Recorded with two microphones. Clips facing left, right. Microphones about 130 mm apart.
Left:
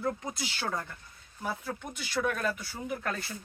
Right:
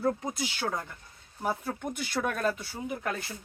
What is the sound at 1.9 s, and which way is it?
Speech, 50° right (ahead or behind).